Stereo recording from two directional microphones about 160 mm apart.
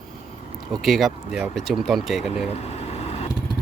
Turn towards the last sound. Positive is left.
turn(degrees=40)  # may be behind; listen again after turning